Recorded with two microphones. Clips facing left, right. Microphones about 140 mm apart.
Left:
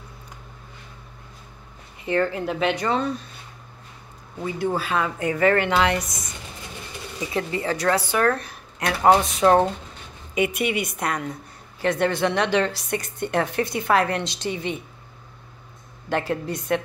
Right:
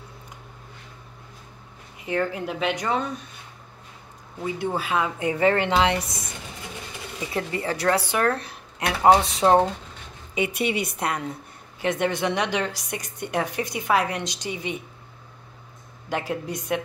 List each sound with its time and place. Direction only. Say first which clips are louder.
2.0 s a woman's voice: left 3 dB; 10° right (ahead or behind)
4.6 s speech: left 2 dB; 20° right (ahead or behind)
7.7 s a woman's voice: left 1 dB; 30° right (ahead or behind)
8.8 s speech: even; 20° right (ahead or behind)
9.3 s speech: left 1 dB; 30° right (ahead or behind)
11.8 s a woman's voice: left 2 dB; 20° right (ahead or behind)
16.1 s a woman's voice: left 3 dB; 10° right (ahead or behind)